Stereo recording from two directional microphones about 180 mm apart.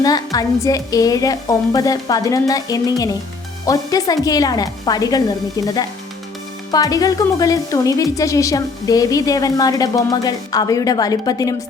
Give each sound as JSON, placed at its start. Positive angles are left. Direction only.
{"t": 0.0, "sound": "speech", "side_deg": 20}